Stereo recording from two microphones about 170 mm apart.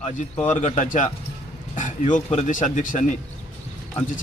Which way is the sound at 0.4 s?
45° left (ahead or behind).